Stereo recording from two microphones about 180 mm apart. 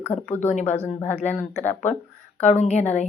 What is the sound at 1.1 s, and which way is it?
Speech, 40° left (ahead or behind).